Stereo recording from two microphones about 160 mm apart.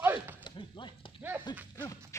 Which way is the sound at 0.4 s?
30° left (ahead or behind).